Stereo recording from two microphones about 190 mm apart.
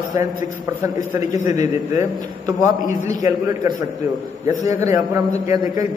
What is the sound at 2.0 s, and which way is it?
Speech, 20° right (ahead or behind).